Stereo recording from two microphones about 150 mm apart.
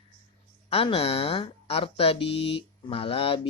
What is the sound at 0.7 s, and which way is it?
Speech, 40° left (ahead or behind).